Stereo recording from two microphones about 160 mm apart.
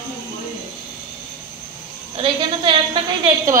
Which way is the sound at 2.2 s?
30° right (ahead or behind).